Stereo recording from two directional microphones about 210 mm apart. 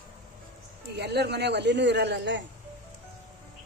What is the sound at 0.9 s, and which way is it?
Speech, 50° right (ahead or behind).